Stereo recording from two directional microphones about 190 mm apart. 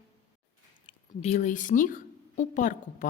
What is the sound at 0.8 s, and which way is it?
A woman's voice, 35° left (ahead or behind).